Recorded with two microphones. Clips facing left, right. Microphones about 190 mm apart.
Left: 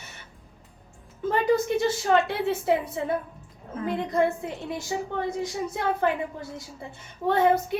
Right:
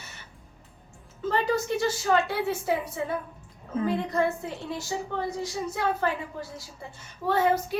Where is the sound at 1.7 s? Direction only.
20° left (ahead or behind).